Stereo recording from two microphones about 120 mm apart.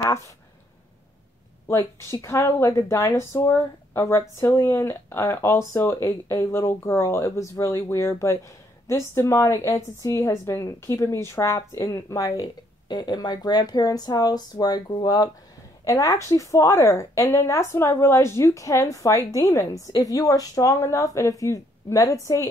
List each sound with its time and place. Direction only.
1.7 s speech: 25° left (ahead or behind); by 15.2 s 40° left (ahead or behind)
15.8 s speech: 30° left (ahead or behind)